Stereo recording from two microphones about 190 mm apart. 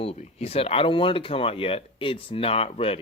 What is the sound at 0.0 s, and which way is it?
Speech, 30° left (ahead or behind).